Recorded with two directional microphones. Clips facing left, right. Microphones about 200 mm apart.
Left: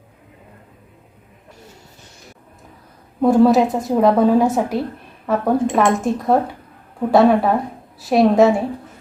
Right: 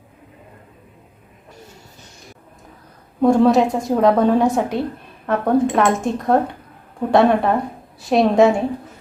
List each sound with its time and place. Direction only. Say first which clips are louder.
3.2 s a woman's voice: left 1 dB; 5° left (ahead or behind)